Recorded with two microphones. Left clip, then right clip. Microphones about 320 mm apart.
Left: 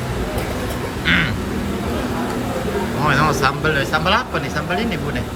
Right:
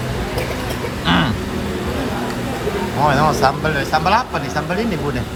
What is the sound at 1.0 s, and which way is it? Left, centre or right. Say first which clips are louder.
Bird: even; centre.